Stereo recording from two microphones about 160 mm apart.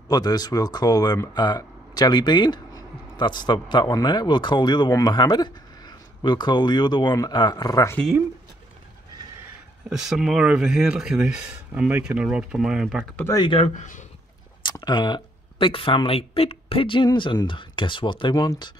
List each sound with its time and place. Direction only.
0.1 s speech: 25° left (ahead or behind)
9.8 s speech: 5° right (ahead or behind)
13.1 s speech: 15° left (ahead or behind)
13.4 s speech: 35° left (ahead or behind)
13.7 s speech: 55° left (ahead or behind)
14.6 s speech: 25° left (ahead or behind)